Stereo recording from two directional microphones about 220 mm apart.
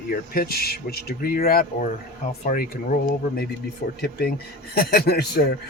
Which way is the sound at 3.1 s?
45° left (ahead or behind).